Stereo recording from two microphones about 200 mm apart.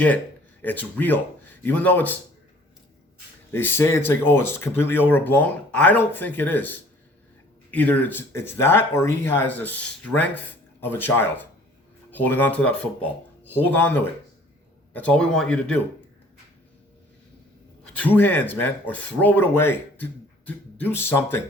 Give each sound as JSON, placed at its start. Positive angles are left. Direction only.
{"t": 0.6, "sound": "speech", "side_deg": 10}
{"t": 3.5, "sound": "speech", "side_deg": 10}
{"t": 17.9, "sound": "speech", "side_deg": 10}